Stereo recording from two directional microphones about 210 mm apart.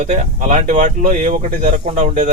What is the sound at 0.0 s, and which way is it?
Speech, 35° right (ahead or behind).